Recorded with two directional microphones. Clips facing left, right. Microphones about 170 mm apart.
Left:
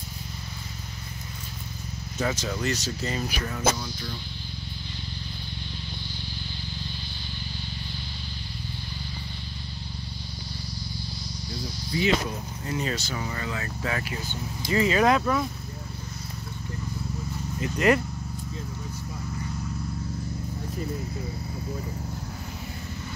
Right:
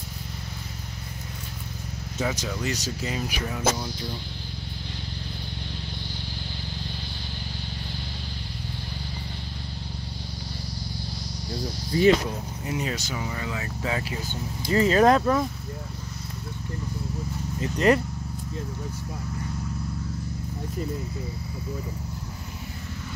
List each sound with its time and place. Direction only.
2.2 s speech: 10° right (ahead or behind)
11.9 s speech: 45° right (ahead or behind)
12.6 s speech: 15° right (ahead or behind)
14.7 s speech: 40° right (ahead or behind)
17.7 s speech: 35° right (ahead or behind)